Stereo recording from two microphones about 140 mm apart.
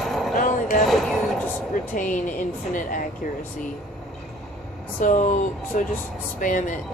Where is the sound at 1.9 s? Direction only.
65° left (ahead or behind).